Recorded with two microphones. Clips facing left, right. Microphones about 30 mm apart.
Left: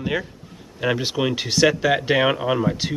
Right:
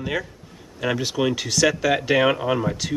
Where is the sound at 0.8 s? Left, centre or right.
Centre.